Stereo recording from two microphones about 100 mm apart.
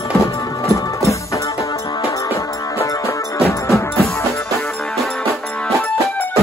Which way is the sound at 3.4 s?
30° left (ahead or behind).